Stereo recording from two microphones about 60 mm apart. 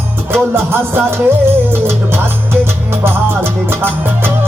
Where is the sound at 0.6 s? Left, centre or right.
Right.